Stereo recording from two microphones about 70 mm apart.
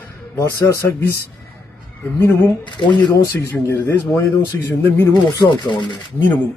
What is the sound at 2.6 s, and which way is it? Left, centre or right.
Speech, left.